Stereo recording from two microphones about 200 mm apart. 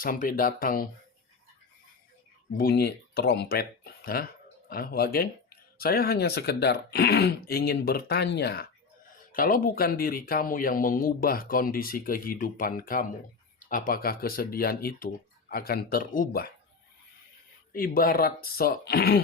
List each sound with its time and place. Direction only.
0.0 s speech: 45° left (ahead or behind)
2.6 s speech: 50° left (ahead or behind)
9.3 s speech: 45° left (ahead or behind)
17.7 s speech: 45° left (ahead or behind)